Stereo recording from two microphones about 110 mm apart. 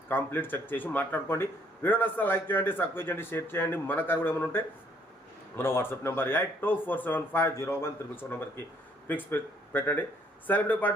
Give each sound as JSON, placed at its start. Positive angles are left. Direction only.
{"t": 0.1, "sound": "speech", "side_deg": 20}